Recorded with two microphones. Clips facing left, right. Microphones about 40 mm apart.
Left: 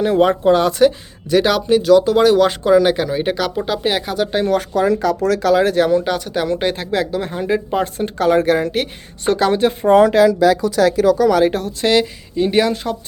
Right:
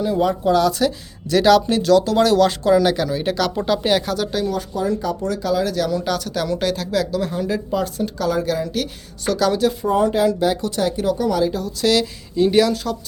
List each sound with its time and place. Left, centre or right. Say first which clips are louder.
0.0 s speech: left 5 dB; left
1.4 s speech: even; centre
4.4 s speech: left 6 dB; left
5.6 s speech: left 7 dB; left
6.0 s speech: left 3 dB; left
8.4 s speech: left 6 dB; left
9.9 s speech: left 9 dB; left
11.8 s speech: left 2 dB; left